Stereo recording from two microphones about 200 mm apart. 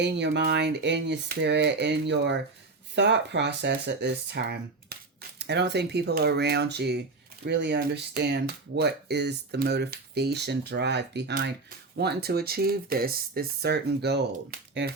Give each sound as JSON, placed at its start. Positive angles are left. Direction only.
{"t": 0.0, "sound": "speech", "side_deg": -60}